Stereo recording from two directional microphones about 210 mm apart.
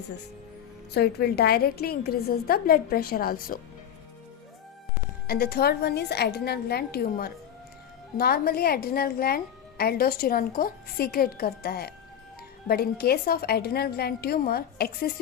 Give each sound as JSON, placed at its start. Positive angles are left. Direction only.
{"t": 0.9, "sound": "speech", "side_deg": 50}
{"t": 5.3, "sound": "speech", "side_deg": 45}